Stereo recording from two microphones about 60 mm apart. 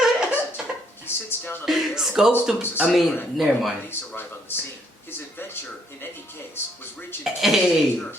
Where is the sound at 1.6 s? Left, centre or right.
Centre.